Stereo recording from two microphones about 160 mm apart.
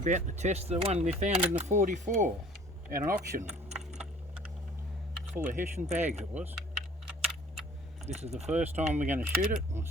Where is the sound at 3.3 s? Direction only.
45° right (ahead or behind).